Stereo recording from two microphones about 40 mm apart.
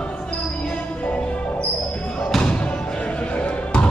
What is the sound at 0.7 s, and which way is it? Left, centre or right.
Music, left.